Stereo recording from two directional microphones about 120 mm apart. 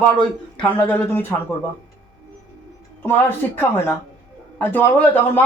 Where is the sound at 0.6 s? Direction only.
15° left (ahead or behind).